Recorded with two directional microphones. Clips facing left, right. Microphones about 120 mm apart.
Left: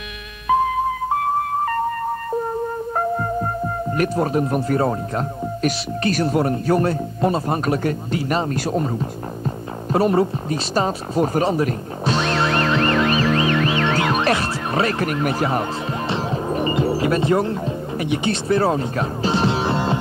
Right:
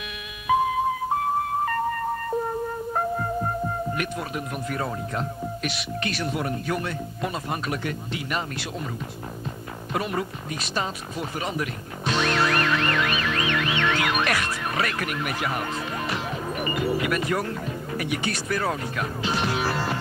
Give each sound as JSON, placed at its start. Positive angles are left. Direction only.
{"t": 3.9, "sound": "speech", "side_deg": 40}
{"t": 9.9, "sound": "a sound", "side_deg": 35}
{"t": 16.1, "sound": "music", "side_deg": 30}